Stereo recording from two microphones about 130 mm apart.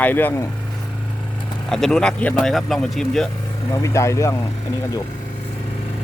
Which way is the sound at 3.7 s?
25° left (ahead or behind).